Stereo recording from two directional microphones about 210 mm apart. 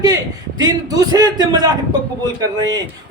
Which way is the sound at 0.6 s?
15° right (ahead or behind).